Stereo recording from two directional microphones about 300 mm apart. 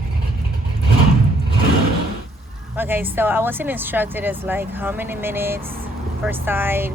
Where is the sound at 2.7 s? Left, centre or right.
Centre.